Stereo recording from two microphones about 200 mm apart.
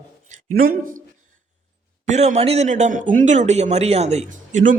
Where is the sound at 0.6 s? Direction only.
45° right (ahead or behind).